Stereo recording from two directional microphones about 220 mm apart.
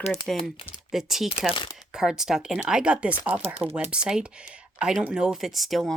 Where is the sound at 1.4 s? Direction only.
20° left (ahead or behind).